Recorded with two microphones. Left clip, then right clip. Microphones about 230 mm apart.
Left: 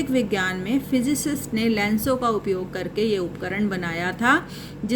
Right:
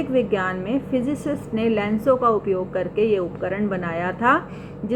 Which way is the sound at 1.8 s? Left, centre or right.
Left.